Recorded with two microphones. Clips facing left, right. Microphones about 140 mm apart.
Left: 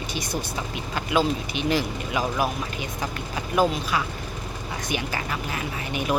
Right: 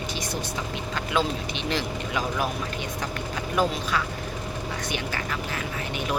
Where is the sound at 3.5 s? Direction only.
10° left (ahead or behind).